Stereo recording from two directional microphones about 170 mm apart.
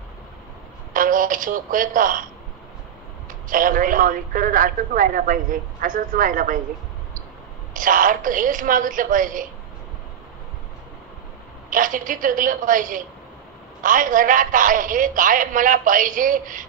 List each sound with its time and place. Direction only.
0.9 s a man's voice: 50° right (ahead or behind)
3.4 s a man's voice: 55° right (ahead or behind)
7.7 s a man's voice: 50° right (ahead or behind)
11.7 s a man's voice: 50° right (ahead or behind)